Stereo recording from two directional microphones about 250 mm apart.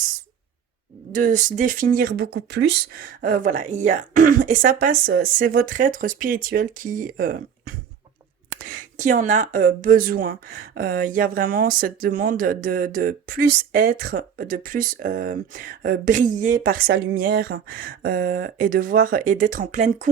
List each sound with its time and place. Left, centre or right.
1.1 s speech: right